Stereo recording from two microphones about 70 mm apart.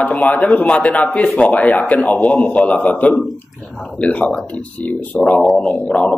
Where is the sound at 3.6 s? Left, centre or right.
Centre.